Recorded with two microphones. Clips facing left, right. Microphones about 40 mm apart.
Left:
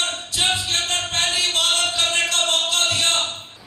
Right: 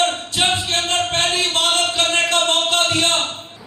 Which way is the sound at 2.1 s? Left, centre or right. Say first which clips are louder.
Right 4 dB; right.